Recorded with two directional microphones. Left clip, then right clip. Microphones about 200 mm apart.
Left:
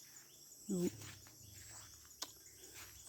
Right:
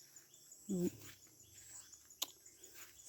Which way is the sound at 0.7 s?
15° right (ahead or behind).